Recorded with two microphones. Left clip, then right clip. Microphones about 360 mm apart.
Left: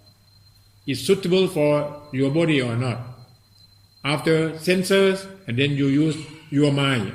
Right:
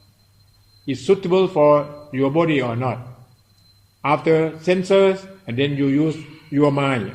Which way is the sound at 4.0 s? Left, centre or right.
Centre.